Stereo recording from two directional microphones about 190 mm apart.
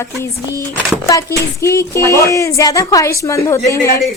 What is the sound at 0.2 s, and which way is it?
A woman's voice, 15° left (ahead or behind).